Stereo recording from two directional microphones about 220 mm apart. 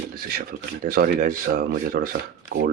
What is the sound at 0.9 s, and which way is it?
Speech, 40° right (ahead or behind).